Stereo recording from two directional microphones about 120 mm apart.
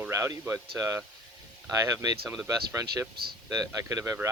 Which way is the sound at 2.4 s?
30° right (ahead or behind).